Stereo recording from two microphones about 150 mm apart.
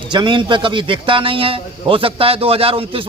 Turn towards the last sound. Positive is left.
turn(degrees=-40)  # may be behind; listen again after turning